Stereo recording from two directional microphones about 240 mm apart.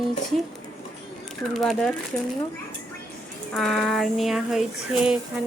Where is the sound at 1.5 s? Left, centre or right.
Centre.